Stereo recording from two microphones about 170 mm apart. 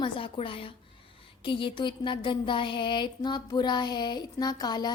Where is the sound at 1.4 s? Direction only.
30° left (ahead or behind).